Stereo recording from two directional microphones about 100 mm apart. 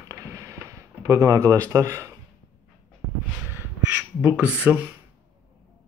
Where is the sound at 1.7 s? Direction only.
30° right (ahead or behind).